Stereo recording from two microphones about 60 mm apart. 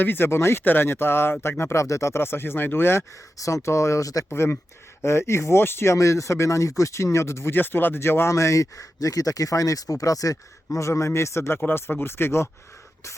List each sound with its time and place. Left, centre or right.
0.0 s speech: left
1.8 s speech: left
2.1 s speech: left
3.3 s speech: left
4.3 s speech: left
8.3 s speech: left